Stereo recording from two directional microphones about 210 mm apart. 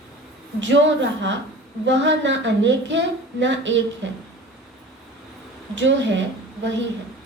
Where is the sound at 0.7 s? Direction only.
60° right (ahead or behind).